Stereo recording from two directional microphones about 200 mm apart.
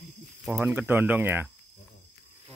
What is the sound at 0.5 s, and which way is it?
Speech, 10° right (ahead or behind).